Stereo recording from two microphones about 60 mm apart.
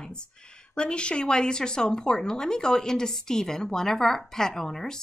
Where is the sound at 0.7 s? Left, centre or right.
Centre.